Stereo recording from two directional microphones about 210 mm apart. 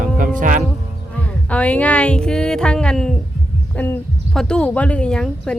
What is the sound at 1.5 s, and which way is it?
Speech, 5° left (ahead or behind).